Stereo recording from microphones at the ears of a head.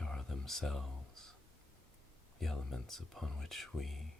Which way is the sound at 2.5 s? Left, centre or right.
Centre.